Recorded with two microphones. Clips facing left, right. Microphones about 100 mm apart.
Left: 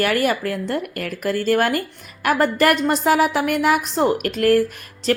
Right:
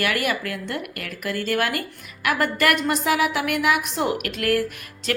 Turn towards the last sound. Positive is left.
turn(degrees=35)  # may be behind; listen again after turning